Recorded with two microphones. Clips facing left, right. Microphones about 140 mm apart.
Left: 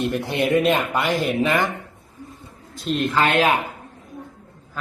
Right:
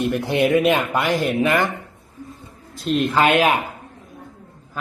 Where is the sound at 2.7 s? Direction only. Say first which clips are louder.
Right 3 dB; centre (ahead or behind).